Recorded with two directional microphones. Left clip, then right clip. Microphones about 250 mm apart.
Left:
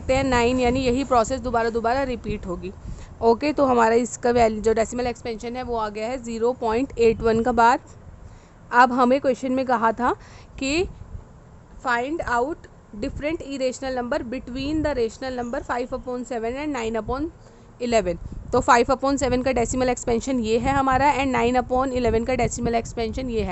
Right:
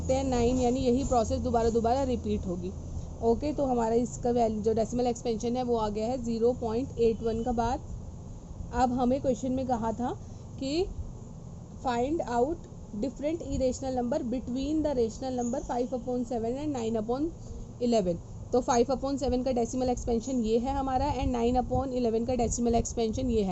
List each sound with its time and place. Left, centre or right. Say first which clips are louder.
0.1 s a woman's voice: left 7 dB; left
3.2 s a woman's voice: left 9 dB; left
4.9 s a woman's voice: left 2 dB; centre